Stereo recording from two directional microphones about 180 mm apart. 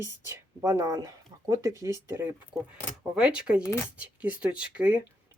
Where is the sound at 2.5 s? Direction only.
5° right (ahead or behind).